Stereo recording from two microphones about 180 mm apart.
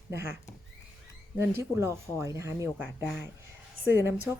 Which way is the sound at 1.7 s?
15° right (ahead or behind).